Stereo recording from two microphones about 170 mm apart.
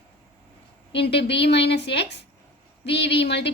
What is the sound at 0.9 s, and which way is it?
A woman's voice, 85° left.